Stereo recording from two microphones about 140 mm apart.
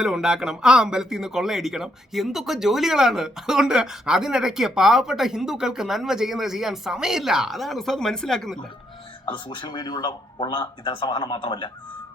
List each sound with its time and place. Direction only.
0.0 s speech: 5° right (ahead or behind)
9.2 s speech: 30° left (ahead or behind)